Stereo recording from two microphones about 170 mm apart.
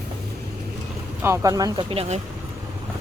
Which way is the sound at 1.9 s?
35° right (ahead or behind).